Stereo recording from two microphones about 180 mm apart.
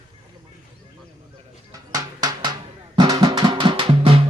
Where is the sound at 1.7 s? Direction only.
20° right (ahead or behind).